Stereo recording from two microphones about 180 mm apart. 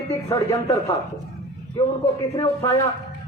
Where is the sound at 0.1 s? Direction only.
15° left (ahead or behind).